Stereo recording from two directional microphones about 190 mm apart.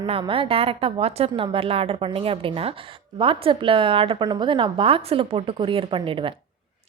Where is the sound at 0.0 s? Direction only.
25° right (ahead or behind).